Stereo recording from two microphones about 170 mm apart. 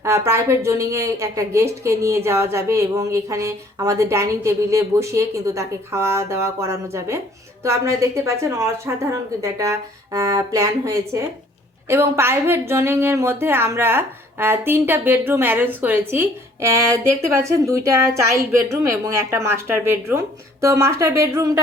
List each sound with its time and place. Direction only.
0.3 s speech: 15° right (ahead or behind)